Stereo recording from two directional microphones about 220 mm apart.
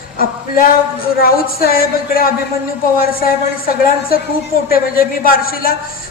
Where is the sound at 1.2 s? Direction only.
40° left (ahead or behind).